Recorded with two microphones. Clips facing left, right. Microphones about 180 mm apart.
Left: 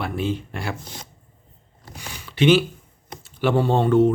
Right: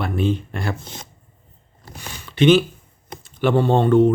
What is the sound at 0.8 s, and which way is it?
Speech, 25° right (ahead or behind).